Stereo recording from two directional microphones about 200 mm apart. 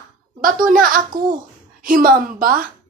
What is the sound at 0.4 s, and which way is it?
Speech, 45° right (ahead or behind).